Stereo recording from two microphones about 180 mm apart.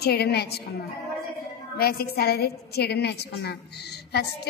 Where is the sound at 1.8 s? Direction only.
60° left (ahead or behind).